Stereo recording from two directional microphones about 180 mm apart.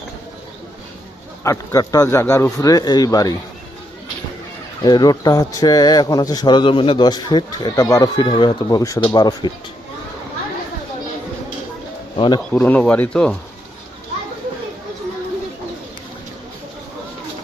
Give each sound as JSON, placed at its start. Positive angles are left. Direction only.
{"t": 1.5, "sound": "a man's voice", "side_deg": 20}
{"t": 4.8, "sound": "a man's voice", "side_deg": 25}
{"t": 12.1, "sound": "speech", "side_deg": 25}
{"t": 12.5, "sound": "speech", "side_deg": 10}